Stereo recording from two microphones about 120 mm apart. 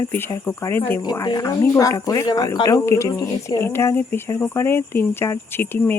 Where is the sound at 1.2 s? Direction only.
30° left (ahead or behind).